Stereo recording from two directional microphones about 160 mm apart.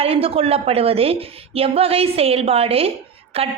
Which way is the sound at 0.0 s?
35° right (ahead or behind).